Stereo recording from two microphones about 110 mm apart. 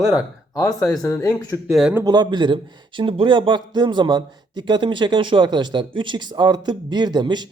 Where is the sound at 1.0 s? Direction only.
30° left (ahead or behind).